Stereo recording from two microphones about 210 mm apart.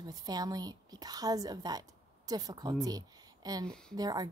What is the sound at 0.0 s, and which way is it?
A woman's voice, 20° right (ahead or behind).